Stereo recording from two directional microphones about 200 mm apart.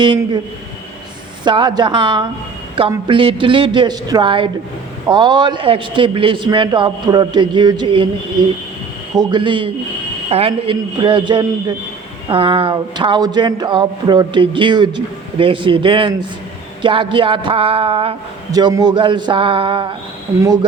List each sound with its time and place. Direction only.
1.5 s speech: 20° right (ahead or behind)